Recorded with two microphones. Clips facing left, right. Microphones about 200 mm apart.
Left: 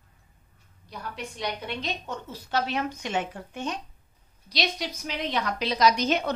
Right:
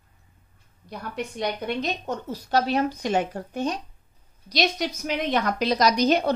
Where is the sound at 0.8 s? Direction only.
50° right (ahead or behind).